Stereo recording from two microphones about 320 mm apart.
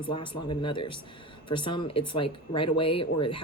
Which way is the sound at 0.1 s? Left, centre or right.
Centre.